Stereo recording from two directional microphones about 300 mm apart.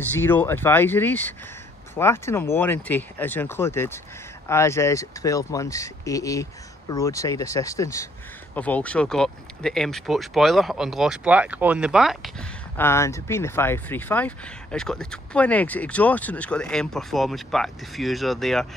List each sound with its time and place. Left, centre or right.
0.2 s speech: centre